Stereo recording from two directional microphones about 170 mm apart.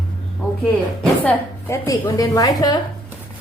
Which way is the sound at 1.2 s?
20° left (ahead or behind).